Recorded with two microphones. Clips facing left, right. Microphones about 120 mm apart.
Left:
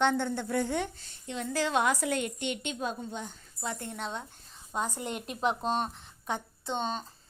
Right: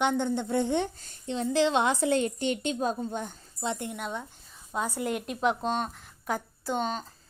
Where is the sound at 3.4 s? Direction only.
25° right (ahead or behind).